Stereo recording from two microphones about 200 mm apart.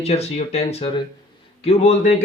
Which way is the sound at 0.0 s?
30° left (ahead or behind).